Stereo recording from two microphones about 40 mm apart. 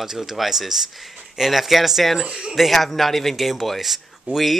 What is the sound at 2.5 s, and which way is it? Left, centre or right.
Speech, centre.